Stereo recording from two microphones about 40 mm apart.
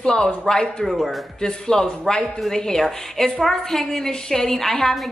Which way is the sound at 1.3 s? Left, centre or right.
Centre.